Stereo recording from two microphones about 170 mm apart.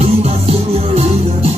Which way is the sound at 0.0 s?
40° right (ahead or behind).